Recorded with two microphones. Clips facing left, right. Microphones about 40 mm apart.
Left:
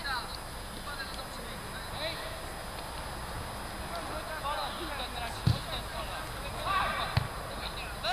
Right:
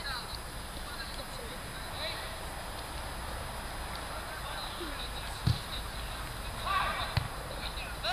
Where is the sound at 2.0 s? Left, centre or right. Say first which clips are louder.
Left 2 dB; centre.